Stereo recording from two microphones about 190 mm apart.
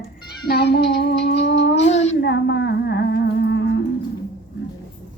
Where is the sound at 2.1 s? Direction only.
65° left (ahead or behind).